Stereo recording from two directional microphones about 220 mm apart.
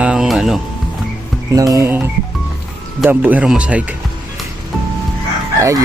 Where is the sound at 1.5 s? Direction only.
15° right (ahead or behind).